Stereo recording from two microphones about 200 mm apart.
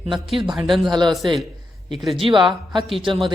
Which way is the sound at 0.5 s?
Centre (ahead or behind).